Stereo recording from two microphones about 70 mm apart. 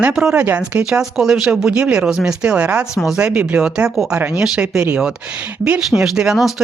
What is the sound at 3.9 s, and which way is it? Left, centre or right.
Speech, centre.